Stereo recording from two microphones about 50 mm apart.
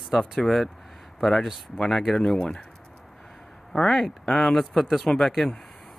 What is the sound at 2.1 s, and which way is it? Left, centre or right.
Speech, centre.